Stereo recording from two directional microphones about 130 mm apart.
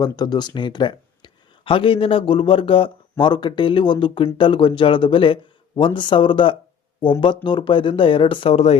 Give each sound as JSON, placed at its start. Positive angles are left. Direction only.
{"t": 0.0, "sound": "speech", "side_deg": 30}